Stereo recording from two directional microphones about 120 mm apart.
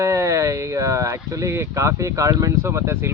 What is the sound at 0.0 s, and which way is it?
Speech, 25° right (ahead or behind).